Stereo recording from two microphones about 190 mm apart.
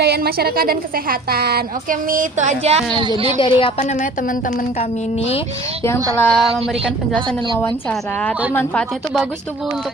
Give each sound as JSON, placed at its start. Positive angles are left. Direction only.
{"t": 0.0, "sound": "a woman's voice", "side_deg": -55}
{"t": 3.3, "sound": "a woman's voice", "side_deg": 25}
{"t": 6.1, "sound": "a woman's voice", "side_deg": 5}
{"t": 7.1, "sound": "a woman's voice", "side_deg": -25}
{"t": 7.6, "sound": "a woman's voice", "side_deg": 5}